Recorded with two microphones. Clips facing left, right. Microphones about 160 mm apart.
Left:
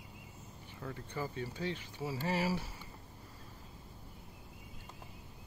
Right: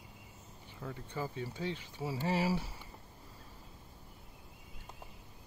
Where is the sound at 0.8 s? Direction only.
5° right (ahead or behind).